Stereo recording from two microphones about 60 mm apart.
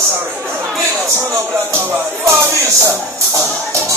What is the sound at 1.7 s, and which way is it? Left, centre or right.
Music, right.